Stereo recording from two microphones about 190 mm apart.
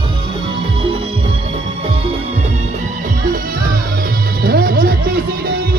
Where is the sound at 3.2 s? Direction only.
45° right (ahead or behind).